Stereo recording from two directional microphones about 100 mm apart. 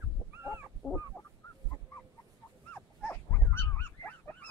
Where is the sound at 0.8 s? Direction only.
35° left (ahead or behind).